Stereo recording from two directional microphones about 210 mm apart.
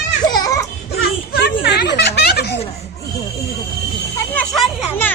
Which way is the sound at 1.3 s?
50° left (ahead or behind).